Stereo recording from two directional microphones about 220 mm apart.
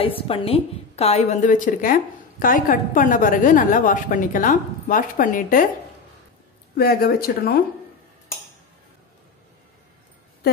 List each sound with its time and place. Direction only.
0.0 s a woman's voice: 25° left (ahead or behind)
6.8 s speech: 45° left (ahead or behind)